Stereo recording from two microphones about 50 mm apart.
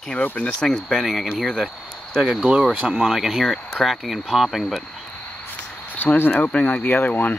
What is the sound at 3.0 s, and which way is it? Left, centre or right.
Speech, centre.